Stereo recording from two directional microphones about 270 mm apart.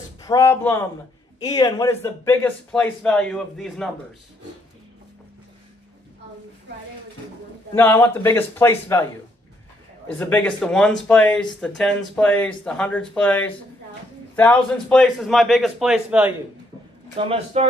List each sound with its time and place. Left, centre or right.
0.2 s a man's voice: centre
7.7 s a man's voice: centre
10.0 s speech: centre
17.2 s speech: right